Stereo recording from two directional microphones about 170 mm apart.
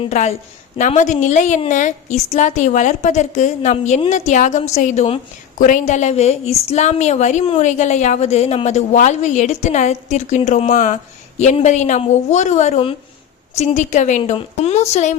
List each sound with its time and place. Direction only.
0.0 s a woman's voice: 40° left (ahead or behind)
5.5 s a woman's voice: 50° left (ahead or behind)
14.2 s a woman's voice: 35° left (ahead or behind)